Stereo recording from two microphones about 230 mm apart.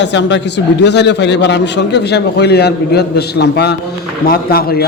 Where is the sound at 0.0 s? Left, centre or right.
Left.